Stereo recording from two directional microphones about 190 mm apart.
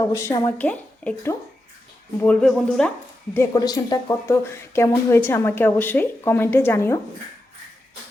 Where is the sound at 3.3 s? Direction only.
15° left (ahead or behind).